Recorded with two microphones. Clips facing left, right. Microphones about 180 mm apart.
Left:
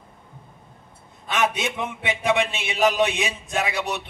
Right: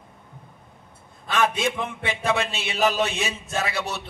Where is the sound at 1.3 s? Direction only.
20° left (ahead or behind).